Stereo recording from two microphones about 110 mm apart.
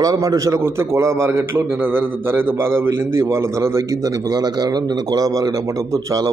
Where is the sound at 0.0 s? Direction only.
35° right (ahead or behind).